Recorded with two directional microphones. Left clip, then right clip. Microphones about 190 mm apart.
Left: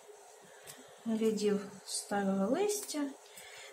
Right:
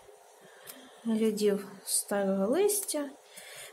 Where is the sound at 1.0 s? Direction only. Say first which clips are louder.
Right 4 dB; 55° right (ahead or behind).